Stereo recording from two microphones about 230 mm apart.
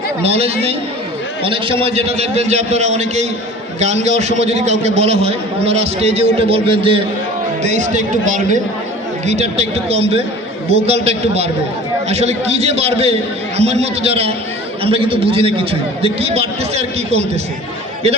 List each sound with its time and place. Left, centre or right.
0.2 s a man's voice: right